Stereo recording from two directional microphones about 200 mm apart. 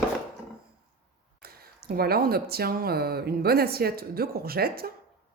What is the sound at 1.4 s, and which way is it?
Speech, 50° right (ahead or behind).